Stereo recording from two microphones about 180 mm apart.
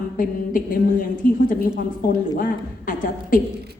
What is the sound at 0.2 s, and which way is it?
A woman's voice, 50° left (ahead or behind).